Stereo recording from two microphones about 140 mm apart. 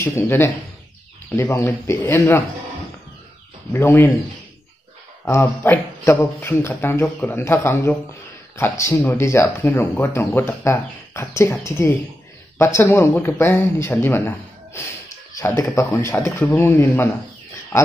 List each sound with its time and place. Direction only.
0.0 s speech: 15° left (ahead or behind)
3.7 s speech: 15° left (ahead or behind)
5.2 s speech: 20° left (ahead or behind)